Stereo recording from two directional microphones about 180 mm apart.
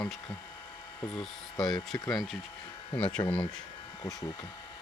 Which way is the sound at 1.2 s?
Centre (ahead or behind).